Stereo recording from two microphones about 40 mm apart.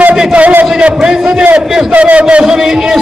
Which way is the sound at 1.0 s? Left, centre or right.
Centre.